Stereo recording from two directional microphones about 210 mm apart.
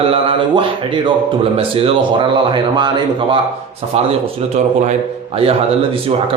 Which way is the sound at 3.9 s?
30° right (ahead or behind).